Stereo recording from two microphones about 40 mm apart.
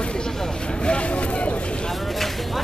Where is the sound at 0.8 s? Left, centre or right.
Left.